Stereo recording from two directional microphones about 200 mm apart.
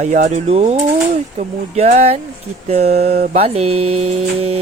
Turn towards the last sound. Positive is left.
turn(degrees=-30)  # may be behind; listen again after turning